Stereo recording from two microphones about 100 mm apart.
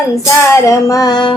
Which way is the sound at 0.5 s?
35° left (ahead or behind).